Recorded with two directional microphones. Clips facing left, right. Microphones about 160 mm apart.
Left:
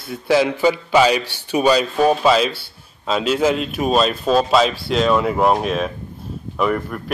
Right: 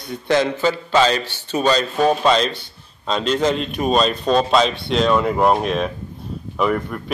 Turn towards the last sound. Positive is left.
turn(degrees=0)  # may be behind; listen again after turning